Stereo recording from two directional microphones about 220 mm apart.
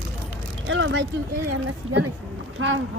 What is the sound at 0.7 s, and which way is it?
Speech, 55° right (ahead or behind).